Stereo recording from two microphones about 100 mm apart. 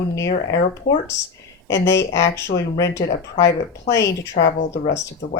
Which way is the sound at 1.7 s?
30° left (ahead or behind).